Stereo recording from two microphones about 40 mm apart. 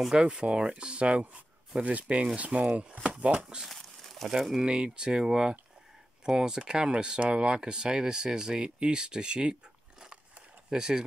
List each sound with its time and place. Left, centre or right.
0.1 s speech: right
3.6 s crumpling: centre
4.6 s speech: right